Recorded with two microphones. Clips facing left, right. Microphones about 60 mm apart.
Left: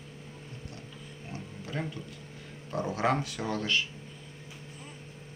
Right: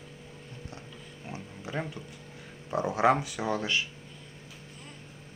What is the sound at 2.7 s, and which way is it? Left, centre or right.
Speech, centre.